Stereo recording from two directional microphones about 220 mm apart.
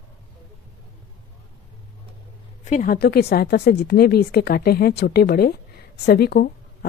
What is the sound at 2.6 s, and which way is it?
A woman's voice, 35° left (ahead or behind).